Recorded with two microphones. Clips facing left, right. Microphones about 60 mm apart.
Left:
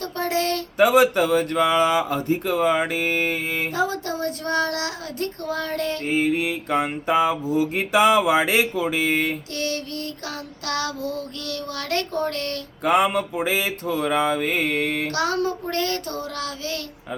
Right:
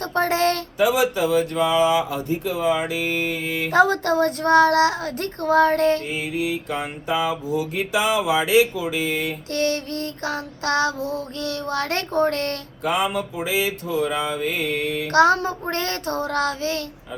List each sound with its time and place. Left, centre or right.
0.0 s child singing: right
0.8 s speech: left
3.8 s child singing: right
6.1 s mantra: left
9.6 s child singing: right
12.8 s speech: left
15.1 s child singing: right